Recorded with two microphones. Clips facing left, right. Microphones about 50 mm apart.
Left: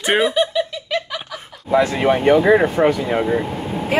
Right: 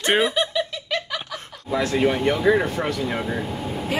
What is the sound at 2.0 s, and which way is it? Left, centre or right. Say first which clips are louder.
Speech: left 4 dB; left.